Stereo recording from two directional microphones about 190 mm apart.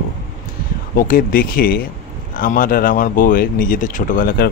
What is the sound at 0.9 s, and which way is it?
Speech, 45° left (ahead or behind).